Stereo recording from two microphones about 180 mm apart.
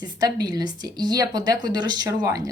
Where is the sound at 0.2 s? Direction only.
20° right (ahead or behind).